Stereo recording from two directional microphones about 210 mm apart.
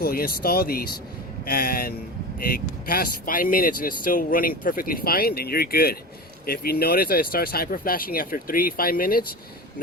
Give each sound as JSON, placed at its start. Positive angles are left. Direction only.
{"t": 0.0, "sound": "speech", "side_deg": 45}